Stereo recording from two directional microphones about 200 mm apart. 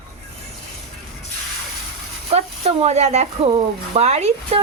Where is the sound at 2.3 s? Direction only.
30° right (ahead or behind).